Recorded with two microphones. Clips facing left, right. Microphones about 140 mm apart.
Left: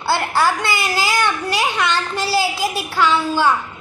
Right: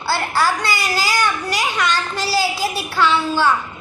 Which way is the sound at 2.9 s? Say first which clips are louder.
Even; 10° left (ahead or behind).